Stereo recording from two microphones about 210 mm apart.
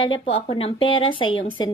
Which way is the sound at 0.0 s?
25° left (ahead or behind).